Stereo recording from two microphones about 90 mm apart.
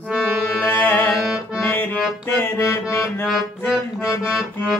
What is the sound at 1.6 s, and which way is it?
Music, 20° left (ahead or behind).